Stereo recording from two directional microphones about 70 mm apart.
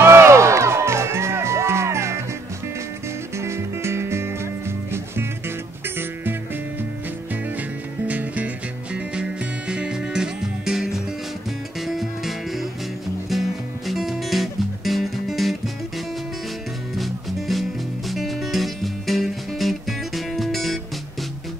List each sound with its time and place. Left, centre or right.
0.0 s music: right
3.3 s music: right
8.1 s music: right; by 15.5 s centre
17.0 s music: centre